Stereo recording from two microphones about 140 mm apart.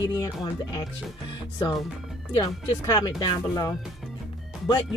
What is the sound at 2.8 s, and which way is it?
Speech, 30° left (ahead or behind).